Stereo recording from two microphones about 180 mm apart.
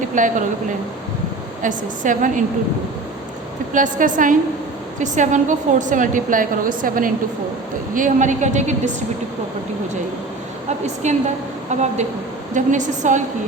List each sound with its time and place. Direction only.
0.1 s a woman's voice: 45° right (ahead or behind)
1.6 s a woman's voice: 45° right (ahead or behind)
3.7 s a woman's voice: 45° right (ahead or behind)
10.7 s a woman's voice: 40° right (ahead or behind)